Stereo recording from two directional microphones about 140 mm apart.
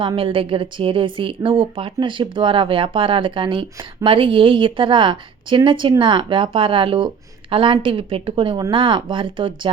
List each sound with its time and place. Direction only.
0.2 s a woman's voice: 40° right (ahead or behind)